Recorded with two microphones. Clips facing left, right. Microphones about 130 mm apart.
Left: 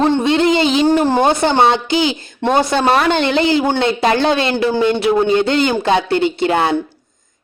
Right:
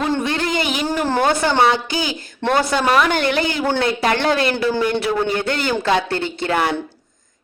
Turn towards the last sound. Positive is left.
turn(degrees=20)  # may be behind; listen again after turning